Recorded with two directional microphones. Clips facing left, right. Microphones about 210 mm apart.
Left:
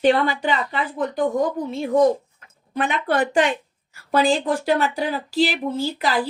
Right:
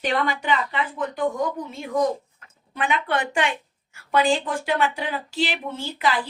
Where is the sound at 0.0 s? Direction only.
30° left (ahead or behind).